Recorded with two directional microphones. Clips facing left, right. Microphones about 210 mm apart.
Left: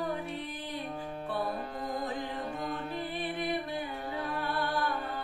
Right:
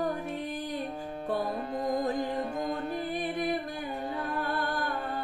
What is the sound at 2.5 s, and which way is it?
Music, 45° right (ahead or behind).